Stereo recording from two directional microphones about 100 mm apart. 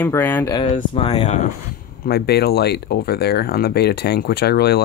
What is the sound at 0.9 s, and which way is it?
Speech, 90° left.